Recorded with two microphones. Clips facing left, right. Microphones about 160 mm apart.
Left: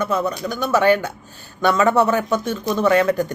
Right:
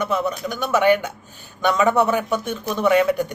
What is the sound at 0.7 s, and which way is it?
Speech, 15° right (ahead or behind).